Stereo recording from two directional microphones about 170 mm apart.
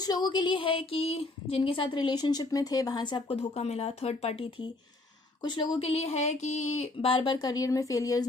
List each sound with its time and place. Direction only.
0.0 s a woman's voice: 25° left (ahead or behind)